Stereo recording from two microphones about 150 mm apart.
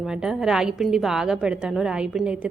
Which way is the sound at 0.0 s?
5° right (ahead or behind).